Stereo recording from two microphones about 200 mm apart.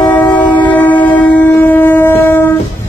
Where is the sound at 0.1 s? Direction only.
10° left (ahead or behind).